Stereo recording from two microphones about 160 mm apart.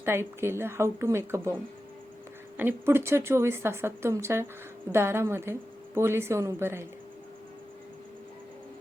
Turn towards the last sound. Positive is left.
turn(degrees=-15)  # may be behind; listen again after turning